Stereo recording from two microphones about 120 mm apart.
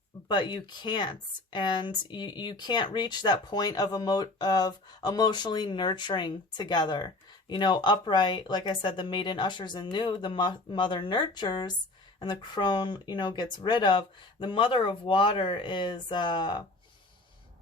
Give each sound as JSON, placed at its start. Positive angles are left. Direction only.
{"t": 0.3, "sound": "speech", "side_deg": 40}